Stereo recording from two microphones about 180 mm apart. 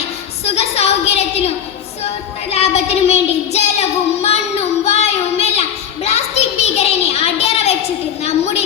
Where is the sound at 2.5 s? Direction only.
35° left (ahead or behind).